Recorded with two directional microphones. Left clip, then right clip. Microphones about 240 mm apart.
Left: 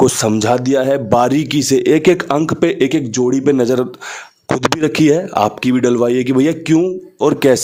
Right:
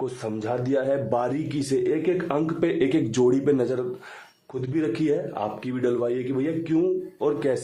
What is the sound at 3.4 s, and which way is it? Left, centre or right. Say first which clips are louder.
Speech: left 10 dB; left.